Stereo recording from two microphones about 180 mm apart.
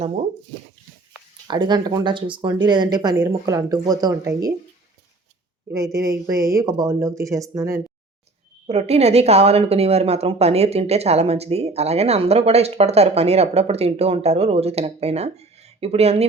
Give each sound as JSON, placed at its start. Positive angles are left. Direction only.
{"t": 1.5, "sound": "speech", "side_deg": -25}
{"t": 5.7, "sound": "speech", "side_deg": -15}
{"t": 8.6, "sound": "speech", "side_deg": -35}